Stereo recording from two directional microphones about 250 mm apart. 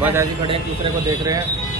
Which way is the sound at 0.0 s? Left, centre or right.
Centre.